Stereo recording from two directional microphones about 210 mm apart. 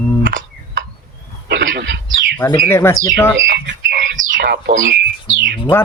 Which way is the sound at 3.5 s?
45° right (ahead or behind).